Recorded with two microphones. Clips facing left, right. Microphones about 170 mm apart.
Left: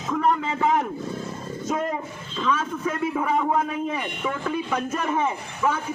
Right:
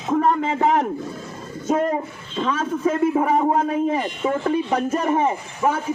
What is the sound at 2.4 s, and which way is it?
A man's voice, 40° right (ahead or behind).